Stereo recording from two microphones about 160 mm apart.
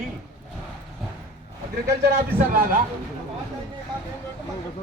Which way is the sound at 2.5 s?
65° right (ahead or behind).